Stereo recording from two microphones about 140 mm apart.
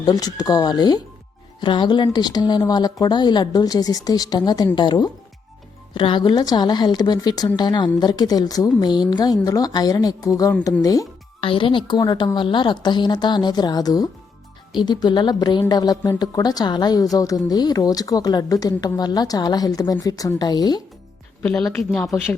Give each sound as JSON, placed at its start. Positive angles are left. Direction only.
{"t": 0.0, "sound": "a woman's voice", "side_deg": 30}
{"t": 11.3, "sound": "a woman's voice", "side_deg": 40}
{"t": 21.4, "sound": "a woman's voice", "side_deg": 5}